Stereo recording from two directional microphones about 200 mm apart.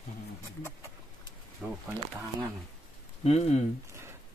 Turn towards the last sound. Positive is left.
turn(degrees=30)  # may be behind; listen again after turning